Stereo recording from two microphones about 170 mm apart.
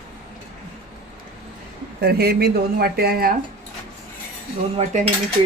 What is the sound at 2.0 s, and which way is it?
Speech, 65° right (ahead or behind).